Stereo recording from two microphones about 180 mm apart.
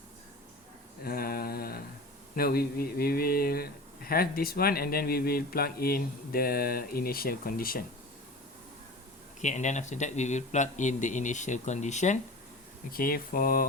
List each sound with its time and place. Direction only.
1.0 s mantra: 55° left (ahead or behind)
2.3 s a man's voice: 55° left (ahead or behind)
9.4 s speech: 40° left (ahead or behind)
12.9 s speech: 55° left (ahead or behind)